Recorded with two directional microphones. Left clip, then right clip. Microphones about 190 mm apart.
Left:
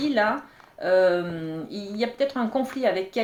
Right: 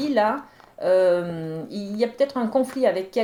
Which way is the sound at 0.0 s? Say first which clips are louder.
Right 2 dB; 45° right (ahead or behind).